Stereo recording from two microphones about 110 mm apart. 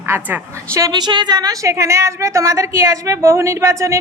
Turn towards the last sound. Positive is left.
turn(degrees=-25)  # may be behind; listen again after turning